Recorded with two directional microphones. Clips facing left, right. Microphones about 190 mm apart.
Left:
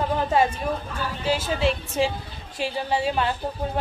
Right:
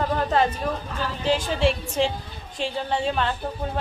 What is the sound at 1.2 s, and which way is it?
Speech, 5° left (ahead or behind).